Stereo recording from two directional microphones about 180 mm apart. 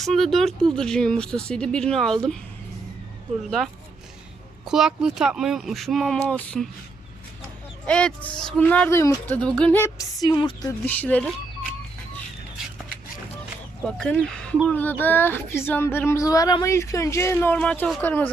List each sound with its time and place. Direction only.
0.0 s speech: centre (ahead or behind)
4.6 s speech: 5° right (ahead or behind)
7.9 s speech: 5° left (ahead or behind); by 10.7 s 25° left (ahead or behind)
10.7 s speech: 10° left (ahead or behind)
13.8 s speech: 5° left (ahead or behind)